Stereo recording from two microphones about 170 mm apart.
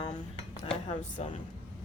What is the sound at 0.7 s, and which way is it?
Speech, 35° left (ahead or behind).